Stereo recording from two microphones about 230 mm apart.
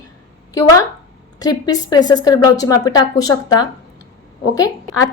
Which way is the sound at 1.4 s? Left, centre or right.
Centre.